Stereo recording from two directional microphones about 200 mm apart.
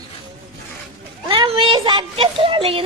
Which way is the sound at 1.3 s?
25° right (ahead or behind).